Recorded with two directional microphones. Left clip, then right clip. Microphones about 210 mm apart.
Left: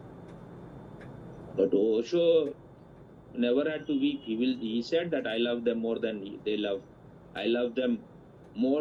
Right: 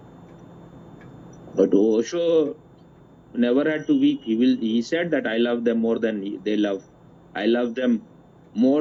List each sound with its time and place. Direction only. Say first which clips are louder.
1.5 s speech: right 7 dB; 45° right (ahead or behind)